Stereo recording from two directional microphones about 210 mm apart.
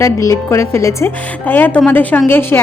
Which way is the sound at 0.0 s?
15° left (ahead or behind).